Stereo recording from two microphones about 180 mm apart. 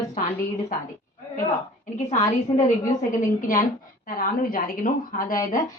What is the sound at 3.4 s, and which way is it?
A woman's voice, 50° left (ahead or behind).